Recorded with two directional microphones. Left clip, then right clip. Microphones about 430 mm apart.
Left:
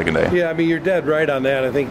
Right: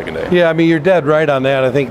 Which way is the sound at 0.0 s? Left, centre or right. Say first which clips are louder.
Left 3 dB; left.